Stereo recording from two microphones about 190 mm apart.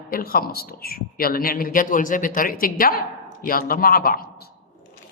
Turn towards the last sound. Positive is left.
turn(degrees=55)  # may be behind; listen again after turning